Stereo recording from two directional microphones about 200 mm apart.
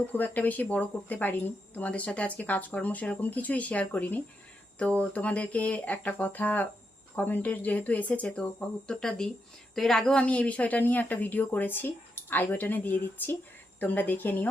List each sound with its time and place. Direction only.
0.1 s speech: 10° left (ahead or behind)